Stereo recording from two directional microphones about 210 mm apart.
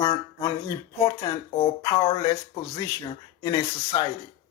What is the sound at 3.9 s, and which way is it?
Speech, 20° left (ahead or behind).